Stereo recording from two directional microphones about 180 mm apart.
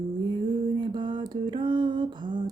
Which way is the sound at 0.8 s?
25° right (ahead or behind).